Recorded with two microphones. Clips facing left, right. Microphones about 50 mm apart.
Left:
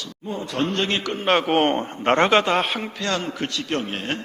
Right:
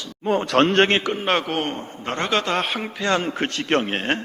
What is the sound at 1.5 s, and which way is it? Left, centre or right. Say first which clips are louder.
Speech: left 6 dB; left.